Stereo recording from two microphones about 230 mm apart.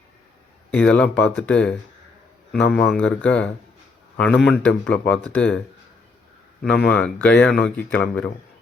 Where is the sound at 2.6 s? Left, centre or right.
Left.